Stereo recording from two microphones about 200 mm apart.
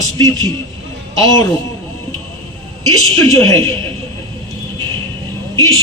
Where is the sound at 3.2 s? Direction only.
15° left (ahead or behind).